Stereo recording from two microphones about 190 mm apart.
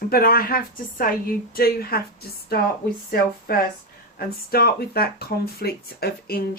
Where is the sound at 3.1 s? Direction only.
50° left (ahead or behind).